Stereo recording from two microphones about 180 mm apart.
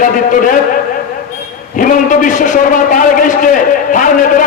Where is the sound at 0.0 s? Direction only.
45° left (ahead or behind).